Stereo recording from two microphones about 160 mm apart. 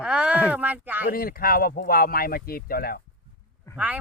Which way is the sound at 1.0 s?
70° left (ahead or behind).